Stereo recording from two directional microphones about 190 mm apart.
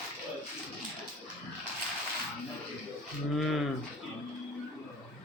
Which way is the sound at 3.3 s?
Centre (ahead or behind).